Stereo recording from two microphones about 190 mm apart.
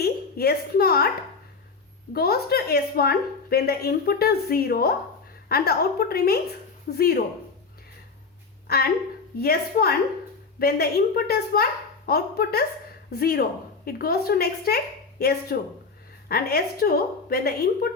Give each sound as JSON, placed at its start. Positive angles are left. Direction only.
{"t": 0.0, "sound": "a woman's voice", "side_deg": 55}
{"t": 2.1, "sound": "a woman's voice", "side_deg": 55}
{"t": 8.6, "sound": "a woman's voice", "side_deg": 55}